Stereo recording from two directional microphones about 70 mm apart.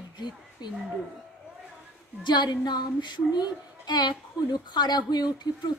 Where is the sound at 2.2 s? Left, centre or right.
Left.